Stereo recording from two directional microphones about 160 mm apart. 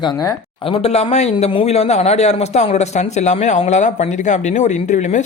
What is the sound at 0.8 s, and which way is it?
A man's voice, 45° left (ahead or behind).